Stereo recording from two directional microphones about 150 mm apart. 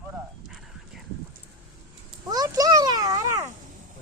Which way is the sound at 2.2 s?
25° right (ahead or behind).